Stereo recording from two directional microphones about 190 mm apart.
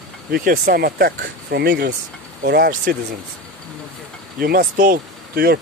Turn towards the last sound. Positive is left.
turn(degrees=-55)  # may be behind; listen again after turning